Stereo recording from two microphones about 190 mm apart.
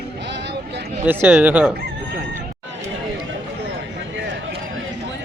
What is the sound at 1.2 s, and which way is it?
Speech, 10° right (ahead or behind).